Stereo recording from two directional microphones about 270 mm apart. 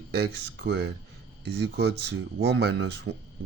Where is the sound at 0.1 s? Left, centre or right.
Right.